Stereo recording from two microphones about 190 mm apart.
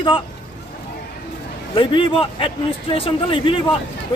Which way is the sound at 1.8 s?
25° left (ahead or behind).